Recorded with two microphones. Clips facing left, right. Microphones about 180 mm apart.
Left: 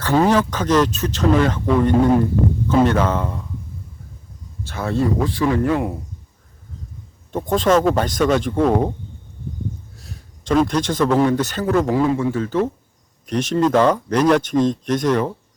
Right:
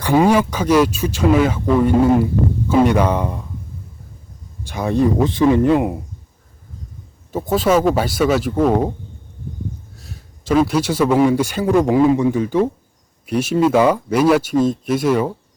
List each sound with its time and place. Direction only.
0.0 s speech: 10° right (ahead or behind)
4.6 s speech: 15° right (ahead or behind)
7.3 s speech: 5° right (ahead or behind)
9.9 s speech: centre (ahead or behind)